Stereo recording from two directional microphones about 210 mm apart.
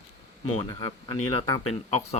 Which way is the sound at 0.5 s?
20° left (ahead or behind).